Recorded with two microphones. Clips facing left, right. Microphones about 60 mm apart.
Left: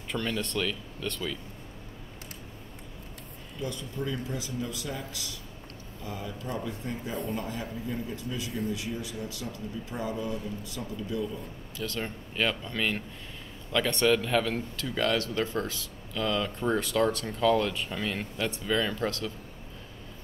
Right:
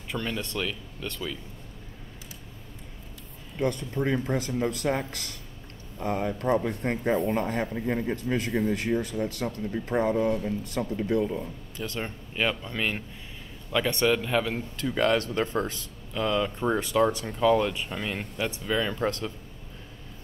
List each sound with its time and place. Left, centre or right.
0.1 s speech: centre
3.5 s speech: right
11.7 s speech: right
12.4 s speech: centre
14.8 s speech: right
16.1 s speech: centre
19.0 s speech: right